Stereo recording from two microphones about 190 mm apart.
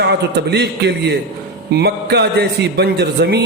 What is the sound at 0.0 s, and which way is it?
A man's voice, 60° right (ahead or behind).